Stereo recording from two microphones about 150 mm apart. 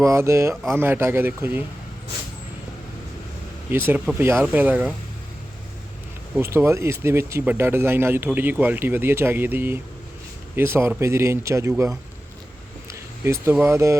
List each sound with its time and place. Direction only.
0.0 s speech: 20° right (ahead or behind)
3.7 s speech: 15° right (ahead or behind)
6.3 s speech: 15° right (ahead or behind)
12.9 s speech: 20° right (ahead or behind)